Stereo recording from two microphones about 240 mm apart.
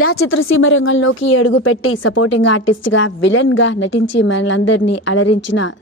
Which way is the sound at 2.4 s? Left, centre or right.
Left.